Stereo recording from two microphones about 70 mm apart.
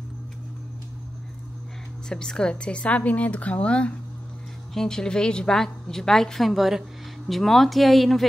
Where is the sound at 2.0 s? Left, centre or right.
Centre.